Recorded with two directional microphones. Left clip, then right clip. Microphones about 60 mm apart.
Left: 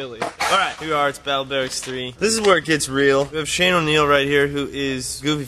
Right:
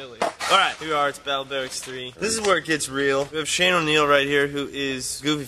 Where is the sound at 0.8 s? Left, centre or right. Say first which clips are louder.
Left 3 dB; centre.